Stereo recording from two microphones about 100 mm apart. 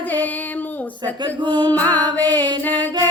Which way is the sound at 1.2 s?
50° right (ahead or behind).